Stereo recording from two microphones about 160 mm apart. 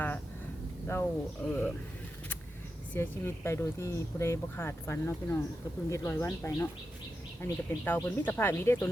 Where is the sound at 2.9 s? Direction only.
15° left (ahead or behind).